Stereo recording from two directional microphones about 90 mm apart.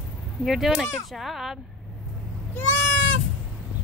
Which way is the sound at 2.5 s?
20° left (ahead or behind).